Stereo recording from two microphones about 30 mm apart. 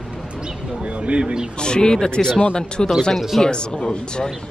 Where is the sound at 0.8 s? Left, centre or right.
Right.